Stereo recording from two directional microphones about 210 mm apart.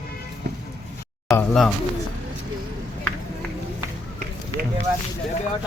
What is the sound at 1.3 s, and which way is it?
Speech, 5° left (ahead or behind).